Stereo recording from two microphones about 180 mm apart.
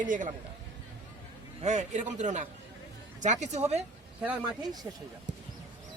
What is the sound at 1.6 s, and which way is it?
Speech, 40° right (ahead or behind).